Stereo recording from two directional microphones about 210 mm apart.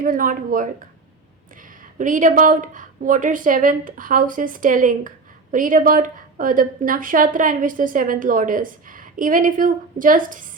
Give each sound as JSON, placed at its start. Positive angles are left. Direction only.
{"t": 0.0, "sound": "speech", "side_deg": -40}
{"t": 2.0, "sound": "speech", "side_deg": -40}